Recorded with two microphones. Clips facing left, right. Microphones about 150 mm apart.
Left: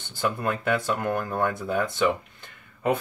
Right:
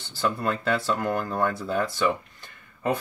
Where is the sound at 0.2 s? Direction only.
15° left (ahead or behind).